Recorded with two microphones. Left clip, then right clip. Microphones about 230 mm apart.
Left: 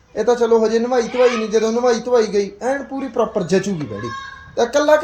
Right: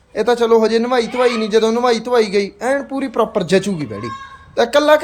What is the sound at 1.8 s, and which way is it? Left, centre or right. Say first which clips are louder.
A man's voice: right 1 dB; centre.